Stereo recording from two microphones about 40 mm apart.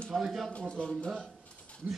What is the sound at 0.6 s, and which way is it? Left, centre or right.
Speech, left.